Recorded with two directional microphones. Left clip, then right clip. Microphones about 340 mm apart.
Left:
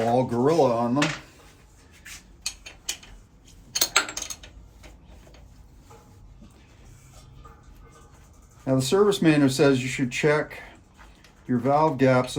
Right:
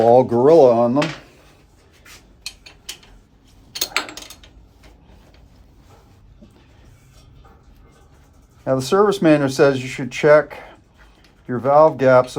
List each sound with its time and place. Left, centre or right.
0.1 s speech: centre
3.8 s a sound: centre
8.6 s speech: centre